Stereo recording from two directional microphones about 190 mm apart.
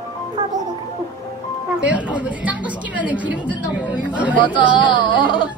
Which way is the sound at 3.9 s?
5° right (ahead or behind).